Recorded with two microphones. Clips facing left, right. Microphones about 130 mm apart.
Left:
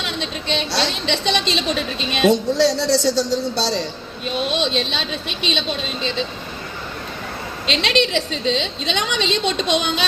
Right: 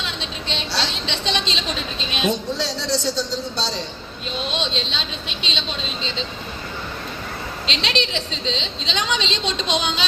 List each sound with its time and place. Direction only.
0.0 s a woman's voice: 60° left (ahead or behind)
4.4 s a woman's voice: 55° left (ahead or behind)
7.7 s a woman's voice: 55° left (ahead or behind)